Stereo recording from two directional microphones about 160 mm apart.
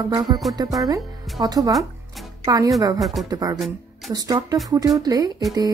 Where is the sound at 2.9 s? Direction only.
Centre (ahead or behind).